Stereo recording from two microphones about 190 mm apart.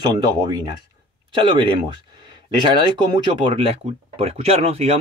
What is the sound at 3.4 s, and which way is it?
Speech, 30° right (ahead or behind).